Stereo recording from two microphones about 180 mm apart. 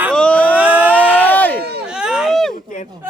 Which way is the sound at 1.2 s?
10° left (ahead or behind).